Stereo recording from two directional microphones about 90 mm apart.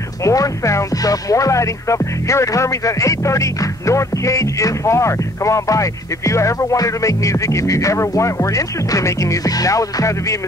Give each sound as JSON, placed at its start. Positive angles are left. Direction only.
{"t": 0.2, "sound": "speech", "side_deg": 35}